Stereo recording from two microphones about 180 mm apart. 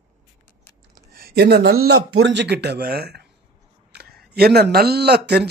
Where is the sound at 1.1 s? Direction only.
60° right (ahead or behind).